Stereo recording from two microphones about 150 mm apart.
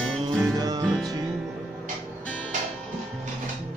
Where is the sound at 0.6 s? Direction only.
25° right (ahead or behind).